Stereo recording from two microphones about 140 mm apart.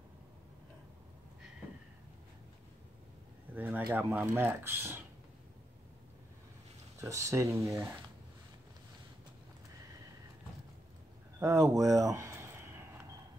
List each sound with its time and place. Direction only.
3.5 s speech: 10° right (ahead or behind)
7.0 s speech: 20° right (ahead or behind)
11.3 s a sound: 25° right (ahead or behind)